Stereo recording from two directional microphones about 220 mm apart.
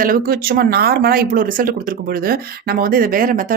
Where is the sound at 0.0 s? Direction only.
40° right (ahead or behind).